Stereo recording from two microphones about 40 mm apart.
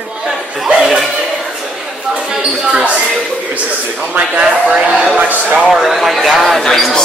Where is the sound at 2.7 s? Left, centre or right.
Right.